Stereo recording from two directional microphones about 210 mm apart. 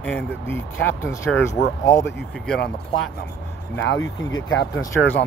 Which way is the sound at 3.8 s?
65° left (ahead or behind).